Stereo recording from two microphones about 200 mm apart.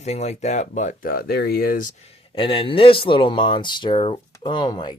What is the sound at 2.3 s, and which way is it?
Speech, 25° left (ahead or behind).